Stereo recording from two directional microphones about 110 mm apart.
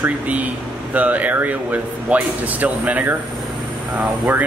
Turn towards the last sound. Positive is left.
turn(degrees=-15)  # may be behind; listen again after turning